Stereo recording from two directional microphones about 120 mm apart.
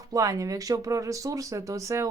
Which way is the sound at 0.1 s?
30° right (ahead or behind).